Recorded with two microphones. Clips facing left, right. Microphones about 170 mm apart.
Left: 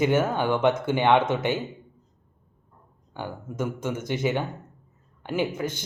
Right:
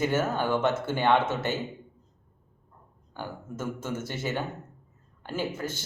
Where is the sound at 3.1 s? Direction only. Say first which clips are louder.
Left 3 dB; 15° left (ahead or behind).